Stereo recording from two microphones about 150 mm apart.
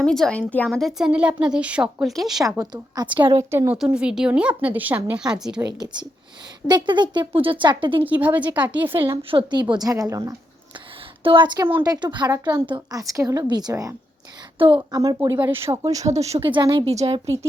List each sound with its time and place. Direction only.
0.0 s a woman's voice: 5° left (ahead or behind)
2.6 s a woman's voice: 25° right (ahead or behind)
3.5 s a woman's voice: 15° right (ahead or behind)
5.6 s a woman's voice: 30° right (ahead or behind)
8.0 s a woman's voice: 10° right (ahead or behind)
9.3 s a woman's voice: 30° right (ahead or behind)
11.2 s a woman's voice: 35° right (ahead or behind)
16.0 s speech: 45° right (ahead or behind)
16.9 s a woman's voice: 45° right (ahead or behind)